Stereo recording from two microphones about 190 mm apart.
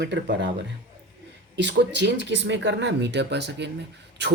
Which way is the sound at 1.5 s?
65° right (ahead or behind).